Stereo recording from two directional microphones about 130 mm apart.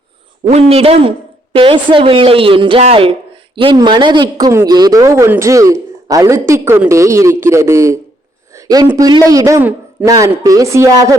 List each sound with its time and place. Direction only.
0.5 s speech: 50° right (ahead or behind); by 7.9 s 20° right (ahead or behind)
8.5 s a sound: 30° right (ahead or behind)
9.0 s speech: 30° right (ahead or behind)